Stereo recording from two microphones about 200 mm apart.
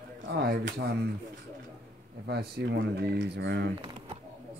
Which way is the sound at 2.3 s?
55° right (ahead or behind).